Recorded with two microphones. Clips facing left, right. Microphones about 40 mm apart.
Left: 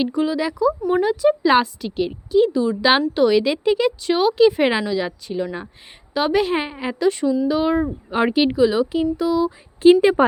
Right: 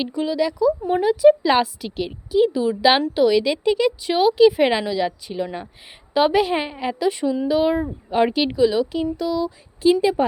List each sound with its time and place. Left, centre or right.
0.0 s speech: centre
1.0 s speech: centre
3.2 s speech: centre
7.0 s speech: centre
8.1 s speech: centre
9.8 s a woman's voice: left